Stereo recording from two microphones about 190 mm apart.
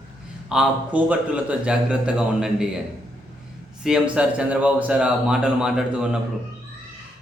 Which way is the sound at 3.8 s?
5° right (ahead or behind).